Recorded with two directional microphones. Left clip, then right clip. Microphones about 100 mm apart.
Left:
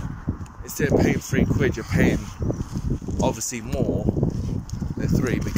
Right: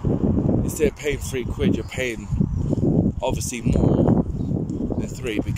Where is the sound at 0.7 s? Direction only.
30° right (ahead or behind).